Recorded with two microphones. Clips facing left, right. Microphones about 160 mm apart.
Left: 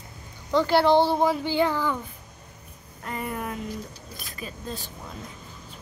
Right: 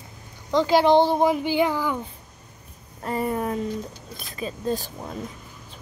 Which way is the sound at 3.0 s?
35° right (ahead or behind).